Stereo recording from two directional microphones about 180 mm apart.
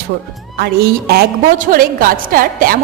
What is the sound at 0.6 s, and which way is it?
A woman's voice, 60° right (ahead or behind).